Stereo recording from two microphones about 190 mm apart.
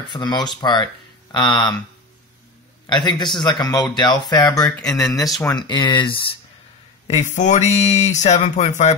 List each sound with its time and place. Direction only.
0.1 s speech: 20° left (ahead or behind)
2.9 s speech: 25° left (ahead or behind)
7.1 s speech: 40° left (ahead or behind)